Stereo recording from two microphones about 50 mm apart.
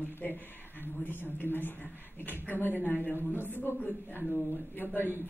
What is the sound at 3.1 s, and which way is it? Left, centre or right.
Speech, right.